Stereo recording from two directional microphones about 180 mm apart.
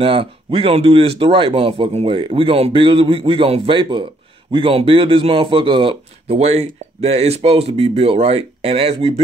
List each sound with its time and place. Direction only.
0.0 s speech: 30° right (ahead or behind)